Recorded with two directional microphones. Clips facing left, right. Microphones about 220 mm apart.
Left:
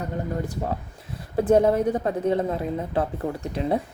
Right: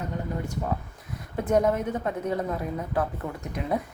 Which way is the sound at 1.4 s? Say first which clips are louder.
Left 5 dB; 30° left (ahead or behind).